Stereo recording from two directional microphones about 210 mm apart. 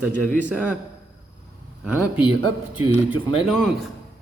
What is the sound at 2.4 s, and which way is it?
Speech, 90° right.